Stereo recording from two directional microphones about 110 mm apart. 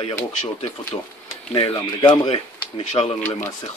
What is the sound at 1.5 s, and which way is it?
Speech, 45° left (ahead or behind).